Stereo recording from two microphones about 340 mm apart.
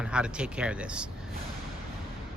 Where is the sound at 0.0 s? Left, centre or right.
Centre.